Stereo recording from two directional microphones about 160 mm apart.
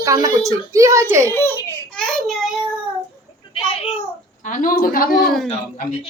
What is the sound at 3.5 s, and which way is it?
Speech, 35° left (ahead or behind).